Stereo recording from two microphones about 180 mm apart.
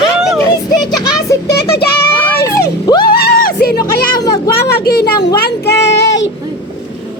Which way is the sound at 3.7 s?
20° left (ahead or behind).